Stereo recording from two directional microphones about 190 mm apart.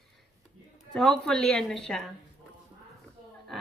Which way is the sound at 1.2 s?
5° left (ahead or behind).